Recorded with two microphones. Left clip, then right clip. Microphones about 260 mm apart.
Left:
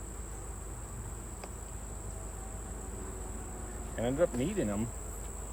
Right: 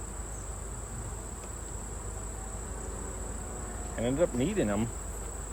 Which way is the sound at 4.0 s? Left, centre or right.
Centre.